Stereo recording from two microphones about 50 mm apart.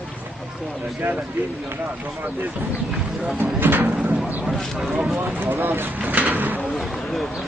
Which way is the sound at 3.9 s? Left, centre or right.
Right.